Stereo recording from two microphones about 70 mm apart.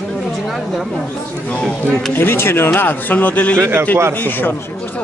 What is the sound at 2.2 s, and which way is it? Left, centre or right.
A man's voice, left.